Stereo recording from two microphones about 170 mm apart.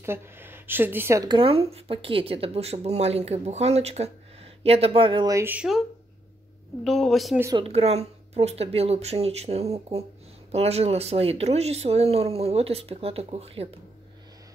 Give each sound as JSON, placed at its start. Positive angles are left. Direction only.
{"t": 0.0, "sound": "speech", "side_deg": -15}
{"t": 7.5, "sound": "speech", "side_deg": -35}